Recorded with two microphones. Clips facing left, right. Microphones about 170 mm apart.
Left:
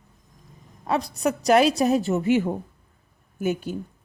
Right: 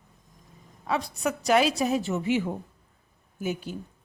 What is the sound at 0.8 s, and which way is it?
Speech, 40° left (ahead or behind).